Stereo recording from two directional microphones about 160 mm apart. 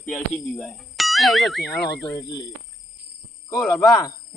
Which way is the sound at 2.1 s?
20° left (ahead or behind).